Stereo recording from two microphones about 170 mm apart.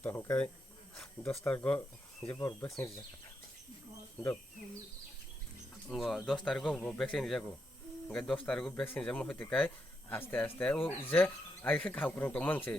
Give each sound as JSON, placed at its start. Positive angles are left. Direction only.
{"t": 0.0, "sound": "speech", "side_deg": 15}
{"t": 5.9, "sound": "speech", "side_deg": 0}